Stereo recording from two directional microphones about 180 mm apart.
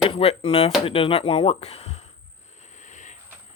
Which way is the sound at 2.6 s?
40° left (ahead or behind).